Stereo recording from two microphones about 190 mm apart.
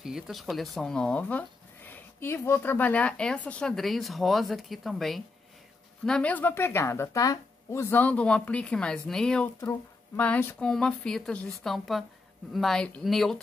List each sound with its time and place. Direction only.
0.0 s speech: centre (ahead or behind)